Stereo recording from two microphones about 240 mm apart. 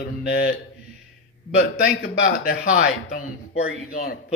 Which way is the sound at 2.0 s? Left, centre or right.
Left.